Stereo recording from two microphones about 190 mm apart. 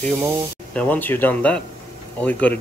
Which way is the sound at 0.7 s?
10° left (ahead or behind).